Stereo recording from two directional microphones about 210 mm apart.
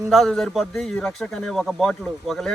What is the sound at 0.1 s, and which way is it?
Speech, centre (ahead or behind).